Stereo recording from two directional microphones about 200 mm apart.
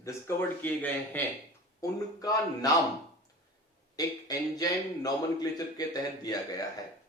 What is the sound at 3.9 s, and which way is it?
A man's voice, 20° left (ahead or behind).